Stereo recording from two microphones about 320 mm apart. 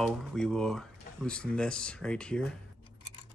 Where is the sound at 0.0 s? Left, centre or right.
Centre.